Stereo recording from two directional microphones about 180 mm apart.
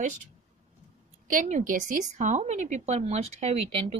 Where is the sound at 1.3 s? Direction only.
45° right (ahead or behind).